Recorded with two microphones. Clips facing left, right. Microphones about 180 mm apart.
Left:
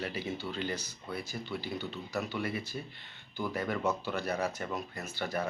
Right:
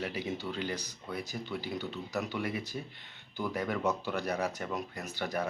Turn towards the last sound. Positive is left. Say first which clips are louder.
# even
turn(degrees=-15)  # may be behind; listen again after turning